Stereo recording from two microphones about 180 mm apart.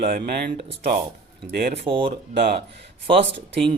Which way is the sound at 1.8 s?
30° right (ahead or behind).